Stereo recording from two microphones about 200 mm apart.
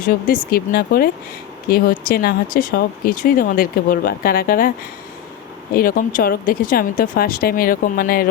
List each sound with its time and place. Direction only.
0.0 s speech: 45° left (ahead or behind)
5.7 s speech: 45° left (ahead or behind)